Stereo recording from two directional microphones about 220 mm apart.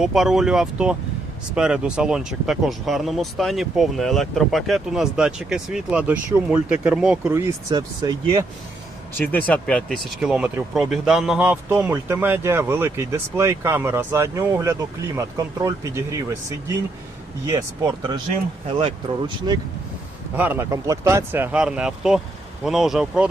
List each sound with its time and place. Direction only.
0.0 s speech: centre (ahead or behind)
9.1 s speech: 10° left (ahead or behind); by 16.2 s 15° right (ahead or behind)
17.4 s speech: 15° right (ahead or behind)
20.3 s speech: 10° right (ahead or behind)